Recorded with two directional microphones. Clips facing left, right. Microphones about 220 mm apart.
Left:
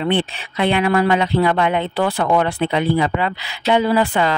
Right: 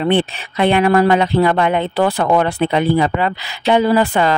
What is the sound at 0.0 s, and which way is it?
Speech, 45° right (ahead or behind).